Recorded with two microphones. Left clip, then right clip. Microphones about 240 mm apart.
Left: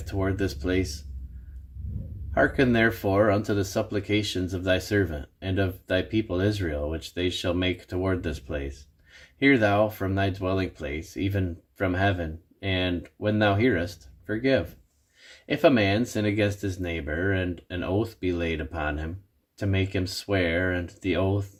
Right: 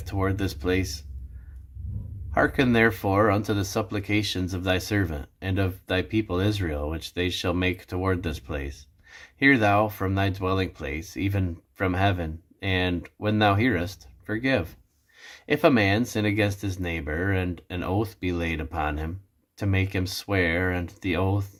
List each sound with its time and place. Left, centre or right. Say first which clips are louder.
0.0 s speech: even; centre
2.3 s speech: even; centre